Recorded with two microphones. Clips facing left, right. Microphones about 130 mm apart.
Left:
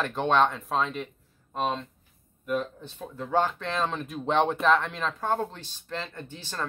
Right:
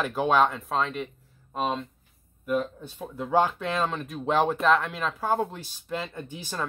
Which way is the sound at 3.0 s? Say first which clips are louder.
Right 2 dB; 15° right (ahead or behind).